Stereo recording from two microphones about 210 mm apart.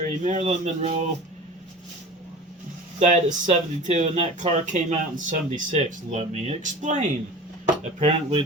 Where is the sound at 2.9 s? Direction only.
35° right (ahead or behind).